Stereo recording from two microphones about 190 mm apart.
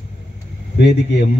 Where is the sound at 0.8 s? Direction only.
65° left (ahead or behind).